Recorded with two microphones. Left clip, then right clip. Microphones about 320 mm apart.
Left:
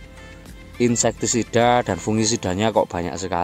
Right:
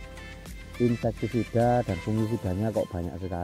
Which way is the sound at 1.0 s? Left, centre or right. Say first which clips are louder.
Left 8 dB; left.